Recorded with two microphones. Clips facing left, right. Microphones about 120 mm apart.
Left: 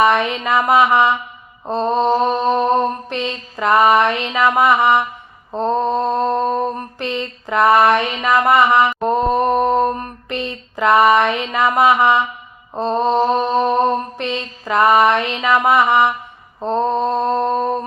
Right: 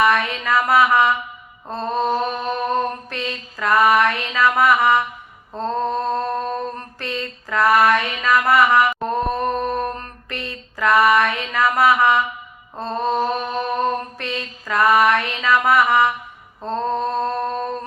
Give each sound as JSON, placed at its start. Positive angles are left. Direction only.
{"t": 0.0, "sound": "mantra", "side_deg": 20}